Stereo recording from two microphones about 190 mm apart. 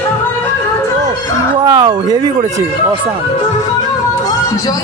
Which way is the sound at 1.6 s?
20° right (ahead or behind).